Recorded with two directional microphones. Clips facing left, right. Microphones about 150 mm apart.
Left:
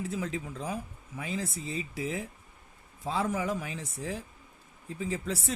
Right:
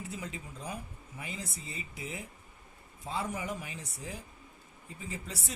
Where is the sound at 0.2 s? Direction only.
90° left.